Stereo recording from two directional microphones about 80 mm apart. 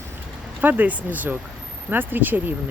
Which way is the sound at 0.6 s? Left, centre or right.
Right.